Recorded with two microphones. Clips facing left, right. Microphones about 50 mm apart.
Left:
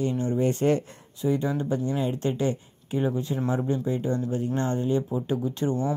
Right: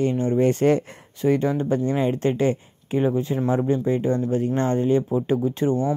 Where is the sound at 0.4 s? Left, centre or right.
Right.